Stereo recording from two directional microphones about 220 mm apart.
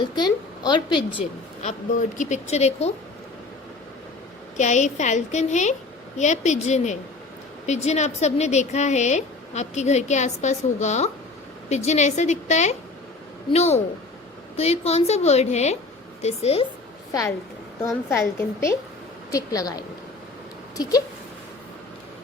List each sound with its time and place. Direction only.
0.0 s a woman's voice: 20° left (ahead or behind)
1.6 s speech: 35° left (ahead or behind)
4.5 s a woman's voice: 30° left (ahead or behind)
17.1 s a woman's voice: 15° left (ahead or behind)